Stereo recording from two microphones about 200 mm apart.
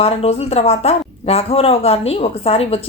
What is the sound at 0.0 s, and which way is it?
Speech, 30° left (ahead or behind).